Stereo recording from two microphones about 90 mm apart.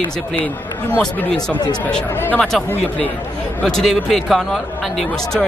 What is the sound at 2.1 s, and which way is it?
Speech, 25° left (ahead or behind).